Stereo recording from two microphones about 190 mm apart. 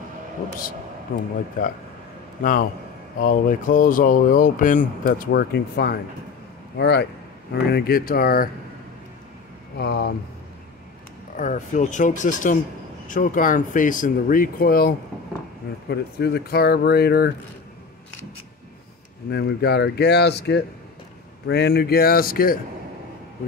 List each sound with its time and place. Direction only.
1.1 s speech: 45° left (ahead or behind)
3.2 s speech: 45° left (ahead or behind)
9.8 s speech: 60° left (ahead or behind)
11.3 s speech: 40° left (ahead or behind); by 17.3 s 55° left (ahead or behind)
19.3 s speech: 60° left (ahead or behind)